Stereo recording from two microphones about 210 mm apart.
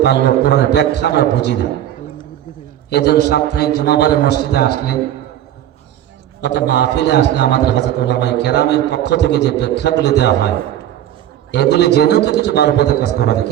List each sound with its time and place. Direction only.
0.0 s a man's voice: 55° left (ahead or behind)
2.9 s a man's voice: 50° left (ahead or behind)
6.4 s a man's voice: 55° left (ahead or behind)
11.5 s a man's voice: 55° left (ahead or behind)